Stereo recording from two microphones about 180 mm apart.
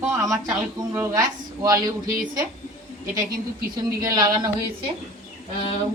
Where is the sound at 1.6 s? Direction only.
20° right (ahead or behind).